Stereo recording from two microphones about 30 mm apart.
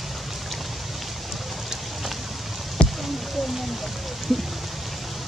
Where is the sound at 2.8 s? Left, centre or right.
Left.